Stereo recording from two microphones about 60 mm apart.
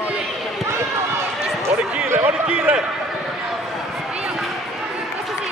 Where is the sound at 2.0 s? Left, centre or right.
Right.